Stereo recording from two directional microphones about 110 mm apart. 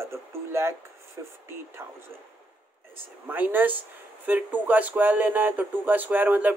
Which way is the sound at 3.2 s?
15° right (ahead or behind).